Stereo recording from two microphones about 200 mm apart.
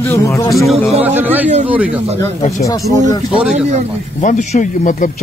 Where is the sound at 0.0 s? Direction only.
15° left (ahead or behind).